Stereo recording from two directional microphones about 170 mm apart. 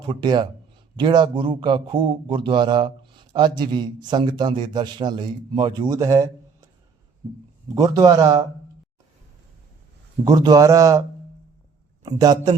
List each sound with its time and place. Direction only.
0.1 s a man's voice: 25° right (ahead or behind)
7.8 s a man's voice: 20° right (ahead or behind)
10.2 s a man's voice: 25° right (ahead or behind)
12.0 s a man's voice: 20° right (ahead or behind)